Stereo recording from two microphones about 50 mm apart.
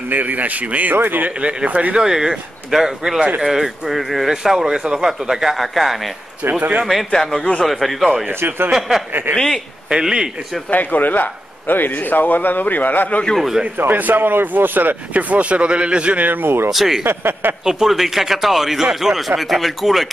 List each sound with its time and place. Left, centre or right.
0.1 s speech: right
1.4 s speech: right
2.0 s speech: centre
7.1 s a man's voice: centre
8.3 s speech: right
8.7 s speech: centre
9.3 s a man's voice: centre
9.8 s speech: centre
10.7 s speech: left
13.7 s speech: right
16.3 s speech: right
16.7 s speech: centre
17.0 s speech: right
17.6 s speech: centre